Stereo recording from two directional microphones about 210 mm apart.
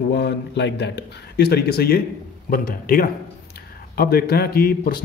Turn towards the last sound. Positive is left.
turn(degrees=45)  # may be behind; listen again after turning